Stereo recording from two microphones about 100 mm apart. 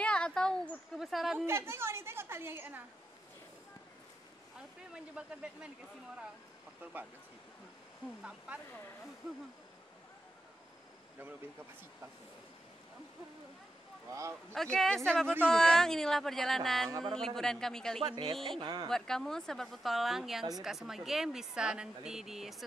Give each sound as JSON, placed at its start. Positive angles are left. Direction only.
{"t": 0.0, "sound": "a woman's voice", "side_deg": 10}
{"t": 1.4, "sound": "a woman's voice", "side_deg": -25}
{"t": 4.9, "sound": "speech", "side_deg": -10}
{"t": 6.8, "sound": "speech", "side_deg": -15}
{"t": 8.2, "sound": "speech", "side_deg": -10}
{"t": 14.0, "sound": "speech", "side_deg": -30}
{"t": 14.5, "sound": "a woman's voice", "side_deg": 0}
{"t": 18.0, "sound": "speech", "side_deg": -50}
{"t": 18.9, "sound": "a woman's voice", "side_deg": 5}